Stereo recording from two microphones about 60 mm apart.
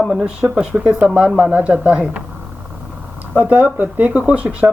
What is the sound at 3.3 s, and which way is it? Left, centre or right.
Speech, right.